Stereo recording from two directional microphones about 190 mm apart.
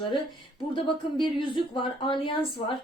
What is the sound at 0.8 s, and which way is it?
Speech, 25° left (ahead or behind).